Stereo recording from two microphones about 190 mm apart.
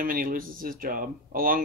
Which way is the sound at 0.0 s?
50° right (ahead or behind).